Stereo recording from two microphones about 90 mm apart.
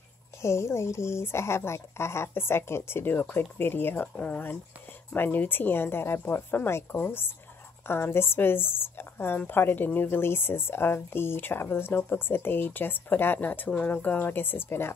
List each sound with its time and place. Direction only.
0.4 s speech: 30° left (ahead or behind)